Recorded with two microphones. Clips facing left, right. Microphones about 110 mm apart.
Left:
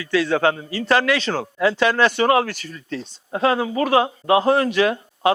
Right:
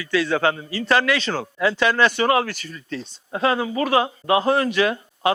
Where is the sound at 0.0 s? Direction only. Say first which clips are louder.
Left 2 dB; 55° left (ahead or behind).